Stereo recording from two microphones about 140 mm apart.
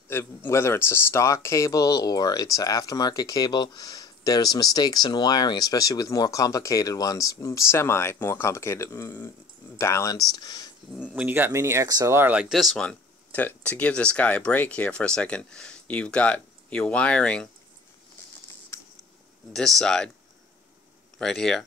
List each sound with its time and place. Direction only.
0.1 s speech: 20° left (ahead or behind)
11.1 s speech: 15° right (ahead or behind); by 17.5 s 5° left (ahead or behind)
19.5 s speech: centre (ahead or behind)
21.2 s speech: 5° left (ahead or behind)